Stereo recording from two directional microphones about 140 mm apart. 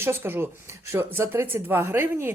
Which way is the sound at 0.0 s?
15° right (ahead or behind).